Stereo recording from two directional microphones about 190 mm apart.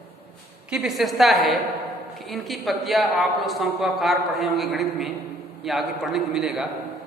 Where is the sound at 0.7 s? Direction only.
Centre (ahead or behind).